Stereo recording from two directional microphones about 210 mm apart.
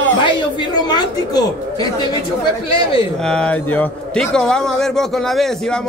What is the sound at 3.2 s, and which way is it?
A man's voice, 5° left (ahead or behind).